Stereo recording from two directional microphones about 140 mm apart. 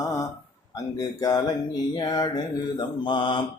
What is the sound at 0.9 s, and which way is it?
Speech, 25° left (ahead or behind).